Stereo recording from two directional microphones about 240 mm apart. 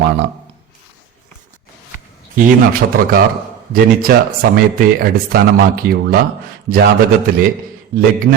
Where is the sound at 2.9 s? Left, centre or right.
Right.